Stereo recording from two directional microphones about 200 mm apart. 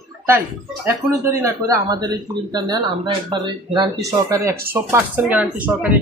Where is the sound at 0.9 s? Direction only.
15° right (ahead or behind).